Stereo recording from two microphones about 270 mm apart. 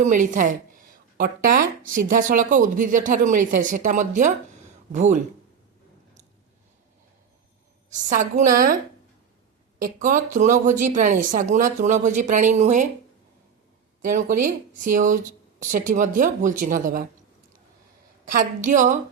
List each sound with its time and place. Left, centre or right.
0.0 s speech: right
7.9 s speech: right
14.0 s speech: right
18.3 s speech: right